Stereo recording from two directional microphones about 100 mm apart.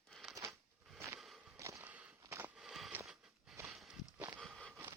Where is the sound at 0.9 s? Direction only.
25° right (ahead or behind).